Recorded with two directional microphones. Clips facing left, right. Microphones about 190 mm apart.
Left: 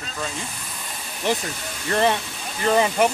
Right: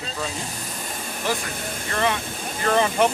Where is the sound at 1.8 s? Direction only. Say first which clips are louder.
Left 4 dB; 35° left (ahead or behind).